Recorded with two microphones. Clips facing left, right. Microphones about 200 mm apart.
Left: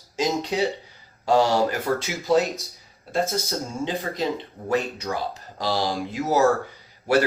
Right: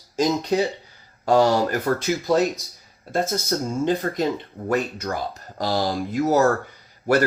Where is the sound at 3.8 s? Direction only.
50° right (ahead or behind).